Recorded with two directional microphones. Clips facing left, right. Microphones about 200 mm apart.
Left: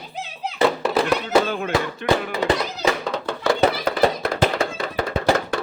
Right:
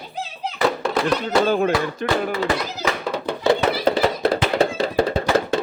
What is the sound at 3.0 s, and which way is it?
Music, 5° right (ahead or behind).